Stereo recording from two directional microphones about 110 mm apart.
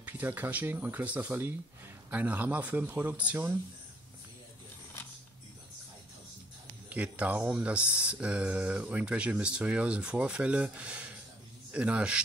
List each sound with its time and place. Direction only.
0.0 s speech: 15° right (ahead or behind)
6.9 s speech: 15° right (ahead or behind)